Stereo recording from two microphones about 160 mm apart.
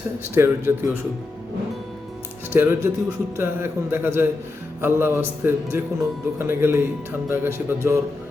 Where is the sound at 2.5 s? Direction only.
15° right (ahead or behind).